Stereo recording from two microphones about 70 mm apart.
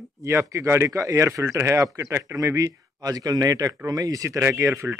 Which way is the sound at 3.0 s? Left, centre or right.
Right.